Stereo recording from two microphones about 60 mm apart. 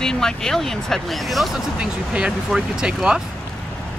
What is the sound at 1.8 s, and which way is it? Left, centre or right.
A woman's voice, centre.